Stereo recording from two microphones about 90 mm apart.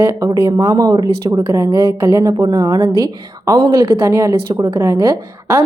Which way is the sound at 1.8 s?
30° right (ahead or behind).